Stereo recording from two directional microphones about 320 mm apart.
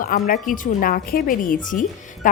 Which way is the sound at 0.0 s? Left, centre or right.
Left.